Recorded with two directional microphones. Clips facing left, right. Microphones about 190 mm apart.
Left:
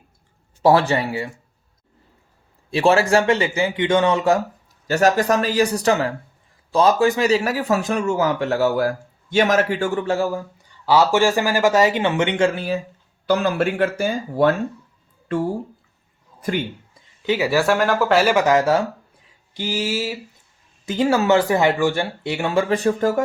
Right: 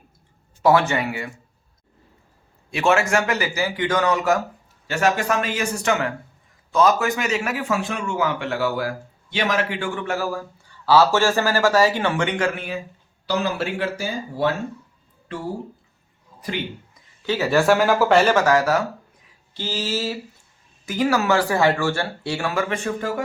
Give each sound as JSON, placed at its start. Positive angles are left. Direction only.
{"t": 0.6, "sound": "speech", "side_deg": 35}
{"t": 2.6, "sound": "speech", "side_deg": 30}
{"t": 4.9, "sound": "speech", "side_deg": 40}
{"t": 10.1, "sound": "speech", "side_deg": 25}
{"t": 13.2, "sound": "speech", "side_deg": 55}
{"t": 16.4, "sound": "speech", "side_deg": 45}
{"t": 17.2, "sound": "a sound", "side_deg": 15}
{"t": 17.6, "sound": "speech", "side_deg": 0}
{"t": 18.3, "sound": "speech", "side_deg": 20}
{"t": 19.5, "sound": "a sound", "side_deg": 15}
{"t": 20.8, "sound": "speech", "side_deg": 25}
{"t": 22.7, "sound": "speech", "side_deg": 40}